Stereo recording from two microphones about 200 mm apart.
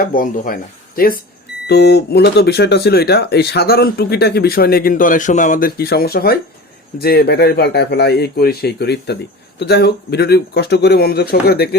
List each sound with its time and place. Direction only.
0.0 s speech: 45° left (ahead or behind)
1.6 s speech: 55° left (ahead or behind)